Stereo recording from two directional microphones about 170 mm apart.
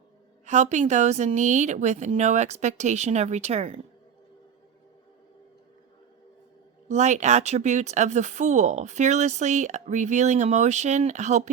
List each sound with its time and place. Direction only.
0.4 s speech: 45° right (ahead or behind)
6.8 s speech: 45° right (ahead or behind)